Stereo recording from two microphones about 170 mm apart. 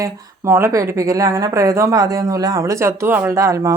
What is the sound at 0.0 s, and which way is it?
Speech, 15° right (ahead or behind).